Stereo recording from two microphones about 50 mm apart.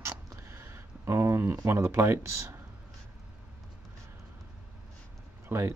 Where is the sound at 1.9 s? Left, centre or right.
Right.